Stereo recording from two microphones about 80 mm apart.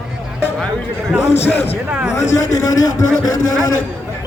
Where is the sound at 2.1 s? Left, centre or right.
Left.